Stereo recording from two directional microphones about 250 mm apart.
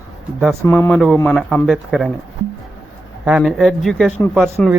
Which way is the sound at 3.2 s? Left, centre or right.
Centre.